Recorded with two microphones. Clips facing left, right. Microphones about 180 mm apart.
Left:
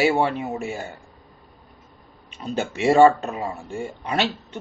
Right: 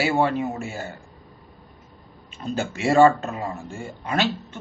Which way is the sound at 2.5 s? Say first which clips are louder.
Left 2 dB; 15° left (ahead or behind).